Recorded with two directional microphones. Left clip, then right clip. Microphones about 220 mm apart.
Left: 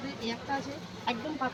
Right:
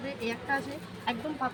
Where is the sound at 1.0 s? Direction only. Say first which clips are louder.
Even; 10° right (ahead or behind).